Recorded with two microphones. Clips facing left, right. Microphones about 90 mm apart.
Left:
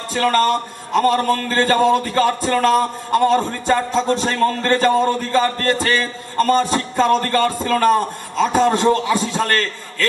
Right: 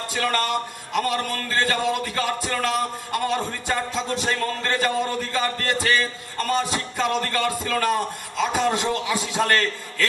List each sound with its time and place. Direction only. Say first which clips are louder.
0.1 s a man's voice: left 8 dB; 35° left (ahead or behind)